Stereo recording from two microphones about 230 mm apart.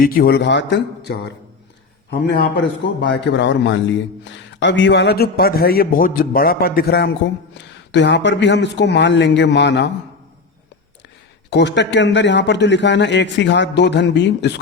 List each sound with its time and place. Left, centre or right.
0.0 s a man's voice: left
2.6 s a man's voice: left
11.5 s a man's voice: left